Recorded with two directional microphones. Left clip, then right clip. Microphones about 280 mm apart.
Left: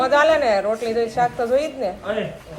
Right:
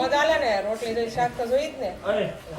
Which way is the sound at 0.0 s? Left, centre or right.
Right.